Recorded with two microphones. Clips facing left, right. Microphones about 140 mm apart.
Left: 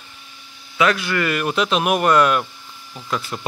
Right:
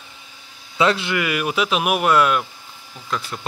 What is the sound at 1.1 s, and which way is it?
Speech, 10° right (ahead or behind).